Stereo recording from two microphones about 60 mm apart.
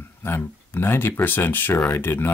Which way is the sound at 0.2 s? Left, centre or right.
Left.